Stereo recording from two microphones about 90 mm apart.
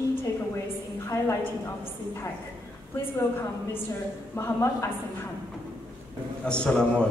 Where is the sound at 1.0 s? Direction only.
25° left (ahead or behind).